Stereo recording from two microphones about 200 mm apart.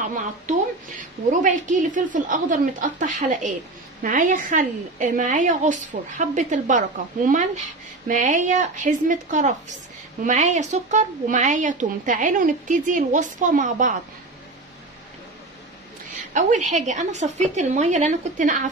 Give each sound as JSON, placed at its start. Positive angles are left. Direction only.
{"t": 0.1, "sound": "a woman's voice", "side_deg": -40}
{"t": 16.3, "sound": "a woman's voice", "side_deg": -40}